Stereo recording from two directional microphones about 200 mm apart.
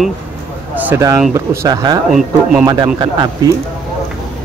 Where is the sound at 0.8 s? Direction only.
15° right (ahead or behind).